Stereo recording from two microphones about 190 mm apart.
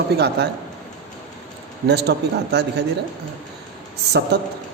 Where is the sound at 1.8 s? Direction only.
60° right (ahead or behind).